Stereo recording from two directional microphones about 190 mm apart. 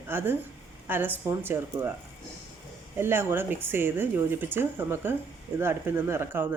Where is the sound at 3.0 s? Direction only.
10° right (ahead or behind).